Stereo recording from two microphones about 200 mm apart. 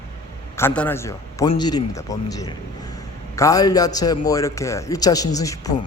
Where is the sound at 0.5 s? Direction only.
10° left (ahead or behind).